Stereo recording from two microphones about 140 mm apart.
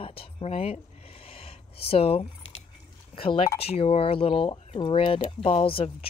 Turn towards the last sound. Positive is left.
turn(degrees=40)  # may be behind; listen again after turning